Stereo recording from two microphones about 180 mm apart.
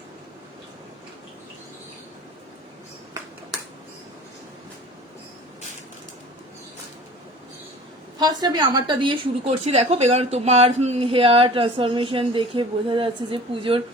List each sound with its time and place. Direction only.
8.2 s a woman's voice: 25° right (ahead or behind)